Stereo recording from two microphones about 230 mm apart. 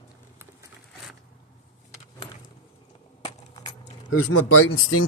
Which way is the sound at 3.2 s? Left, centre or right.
Left.